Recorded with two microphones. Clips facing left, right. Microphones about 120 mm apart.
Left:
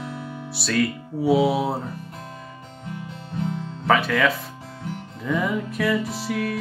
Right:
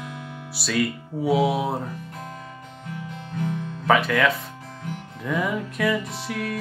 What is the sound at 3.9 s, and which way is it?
Music, centre (ahead or behind).